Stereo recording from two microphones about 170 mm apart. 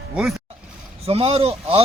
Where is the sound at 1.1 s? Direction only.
35° right (ahead or behind).